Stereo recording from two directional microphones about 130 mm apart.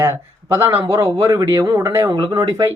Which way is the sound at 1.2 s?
30° right (ahead or behind).